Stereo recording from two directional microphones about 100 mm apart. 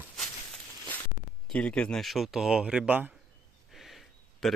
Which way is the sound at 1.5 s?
10° left (ahead or behind).